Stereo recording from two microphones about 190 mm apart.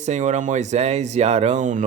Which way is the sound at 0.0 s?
40° right (ahead or behind).